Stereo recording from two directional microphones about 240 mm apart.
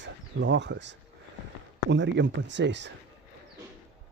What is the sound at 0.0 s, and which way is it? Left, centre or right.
Speech, right.